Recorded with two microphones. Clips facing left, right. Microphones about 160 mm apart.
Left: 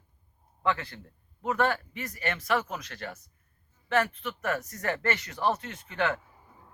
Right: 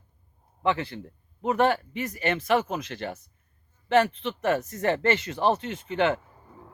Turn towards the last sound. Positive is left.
turn(degrees=-20)  # may be behind; listen again after turning